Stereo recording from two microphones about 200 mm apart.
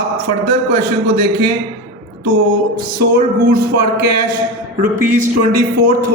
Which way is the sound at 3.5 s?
50° right (ahead or behind).